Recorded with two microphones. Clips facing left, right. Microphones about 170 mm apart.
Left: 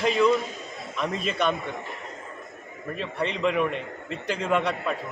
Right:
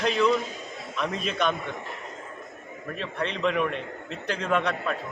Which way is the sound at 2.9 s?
10° left (ahead or behind).